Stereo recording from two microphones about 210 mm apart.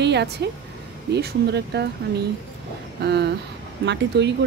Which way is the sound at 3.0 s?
50° right (ahead or behind).